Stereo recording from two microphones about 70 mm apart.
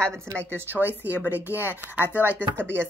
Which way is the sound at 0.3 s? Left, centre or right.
Right.